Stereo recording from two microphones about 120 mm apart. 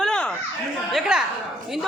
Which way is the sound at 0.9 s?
5° right (ahead or behind).